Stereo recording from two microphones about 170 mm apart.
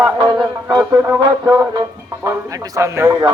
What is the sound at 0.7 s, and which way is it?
Music, 20° right (ahead or behind).